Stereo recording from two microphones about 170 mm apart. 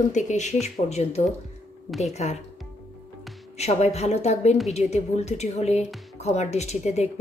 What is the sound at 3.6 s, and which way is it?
A woman's voice, 40° left (ahead or behind).